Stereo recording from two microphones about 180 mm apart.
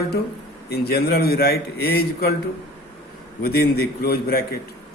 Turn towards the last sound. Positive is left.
turn(degrees=55)  # may be behind; listen again after turning